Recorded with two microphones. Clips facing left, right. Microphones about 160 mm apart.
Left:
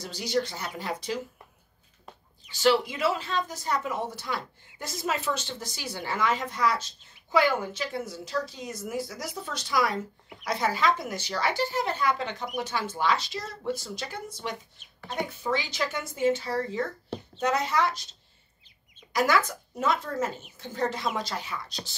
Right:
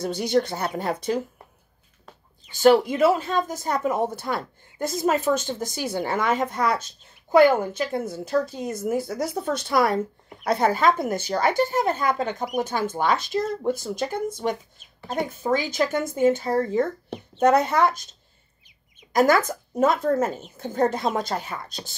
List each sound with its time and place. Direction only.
0.0 s speech: 55° right (ahead or behind)
2.5 s speech: 50° right (ahead or behind)
19.1 s speech: 50° right (ahead or behind)